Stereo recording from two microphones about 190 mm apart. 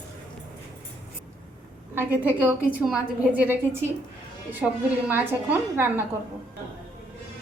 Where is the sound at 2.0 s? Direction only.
10° right (ahead or behind).